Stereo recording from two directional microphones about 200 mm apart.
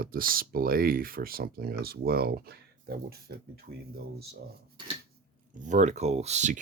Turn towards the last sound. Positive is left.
turn(degrees=-35)  # may be behind; listen again after turning